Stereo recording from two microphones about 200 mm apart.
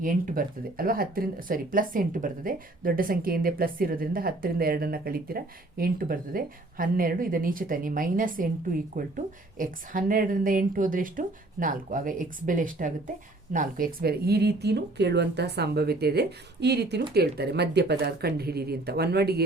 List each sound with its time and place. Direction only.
0.0 s speech: 45° right (ahead or behind)